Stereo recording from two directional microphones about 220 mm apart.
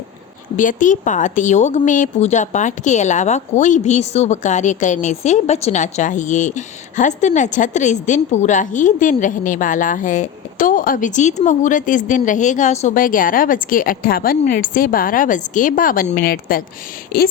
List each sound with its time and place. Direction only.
0.5 s a woman's voice: 35° left (ahead or behind)